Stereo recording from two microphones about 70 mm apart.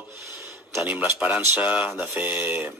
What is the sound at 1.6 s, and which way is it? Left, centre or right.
Speech, right.